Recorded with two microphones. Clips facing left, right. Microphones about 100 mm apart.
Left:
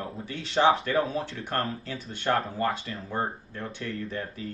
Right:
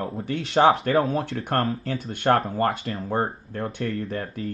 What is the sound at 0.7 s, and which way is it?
Speech, 40° right (ahead or behind).